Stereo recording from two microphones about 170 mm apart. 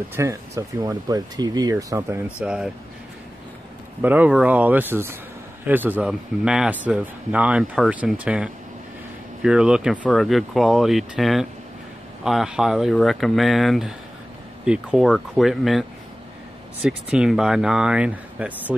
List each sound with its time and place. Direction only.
0.1 s speech: 20° right (ahead or behind)
2.4 s speech: 5° right (ahead or behind)
4.0 s speech: 10° right (ahead or behind)
16.8 s speech: 5° right (ahead or behind)